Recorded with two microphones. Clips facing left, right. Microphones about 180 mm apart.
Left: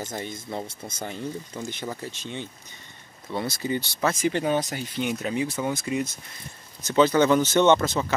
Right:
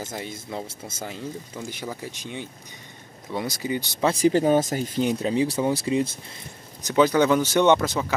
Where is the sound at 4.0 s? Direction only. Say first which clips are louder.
Right 6 dB; 35° right (ahead or behind).